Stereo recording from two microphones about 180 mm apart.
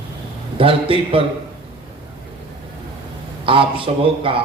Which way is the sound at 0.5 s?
30° right (ahead or behind).